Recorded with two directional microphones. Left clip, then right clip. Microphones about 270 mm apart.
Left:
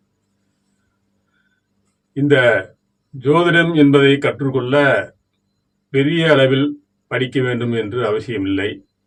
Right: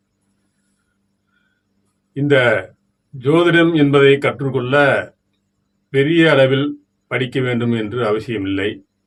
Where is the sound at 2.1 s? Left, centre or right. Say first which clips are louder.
Left 1 dB; centre.